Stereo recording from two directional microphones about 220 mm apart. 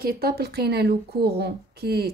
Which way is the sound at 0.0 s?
45° right (ahead or behind).